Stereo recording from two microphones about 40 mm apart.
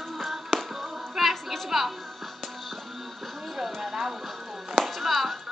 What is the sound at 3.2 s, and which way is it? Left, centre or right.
Music, centre.